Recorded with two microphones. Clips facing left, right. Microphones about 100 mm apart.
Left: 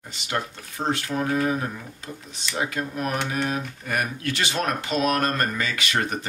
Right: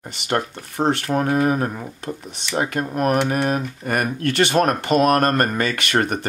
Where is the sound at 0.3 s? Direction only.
60° right (ahead or behind).